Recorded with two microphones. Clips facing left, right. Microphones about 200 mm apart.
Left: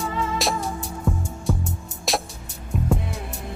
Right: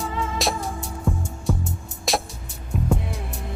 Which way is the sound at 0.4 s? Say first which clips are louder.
Left 1 dB; centre (ahead or behind).